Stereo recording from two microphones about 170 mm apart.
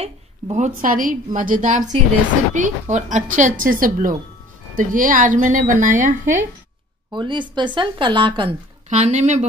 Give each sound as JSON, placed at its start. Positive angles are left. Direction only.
{"t": 0.0, "sound": "a woman's voice", "side_deg": -45}
{"t": 7.1, "sound": "a woman's voice", "side_deg": -25}
{"t": 8.8, "sound": "a woman's voice", "side_deg": -40}